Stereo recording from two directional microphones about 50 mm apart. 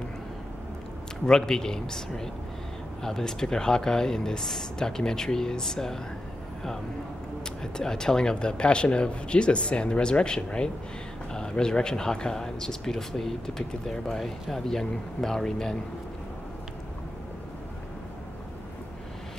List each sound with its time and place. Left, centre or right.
1.2 s speech: centre
7.6 s speech: centre